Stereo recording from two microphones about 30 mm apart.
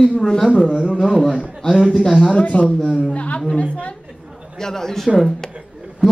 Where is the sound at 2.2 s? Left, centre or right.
Left.